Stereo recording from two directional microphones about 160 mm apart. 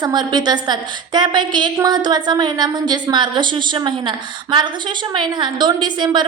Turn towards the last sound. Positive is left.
turn(degrees=-30)  # may be behind; listen again after turning